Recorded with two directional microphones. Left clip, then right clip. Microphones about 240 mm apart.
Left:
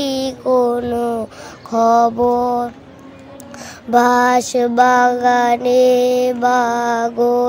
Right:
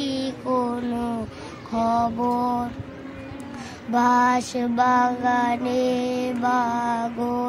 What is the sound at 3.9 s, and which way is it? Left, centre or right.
Child singing, left.